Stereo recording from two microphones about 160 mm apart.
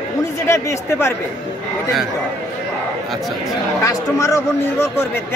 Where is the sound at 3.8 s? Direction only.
20° left (ahead or behind).